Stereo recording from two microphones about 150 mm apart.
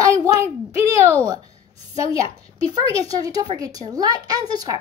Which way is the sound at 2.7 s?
25° right (ahead or behind).